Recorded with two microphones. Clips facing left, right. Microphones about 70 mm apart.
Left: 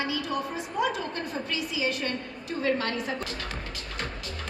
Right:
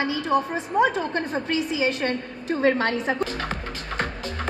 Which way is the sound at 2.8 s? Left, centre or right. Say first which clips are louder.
Right 7 dB; right.